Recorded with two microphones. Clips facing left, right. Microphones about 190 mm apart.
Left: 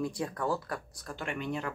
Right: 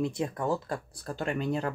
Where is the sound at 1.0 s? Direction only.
35° right (ahead or behind).